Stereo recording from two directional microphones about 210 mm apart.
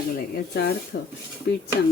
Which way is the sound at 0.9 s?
60° left (ahead or behind).